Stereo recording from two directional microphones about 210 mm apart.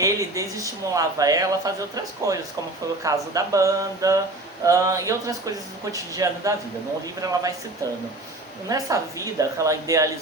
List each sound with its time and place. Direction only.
0.0 s speech: 15° right (ahead or behind)
8.7 s speech: 15° right (ahead or behind)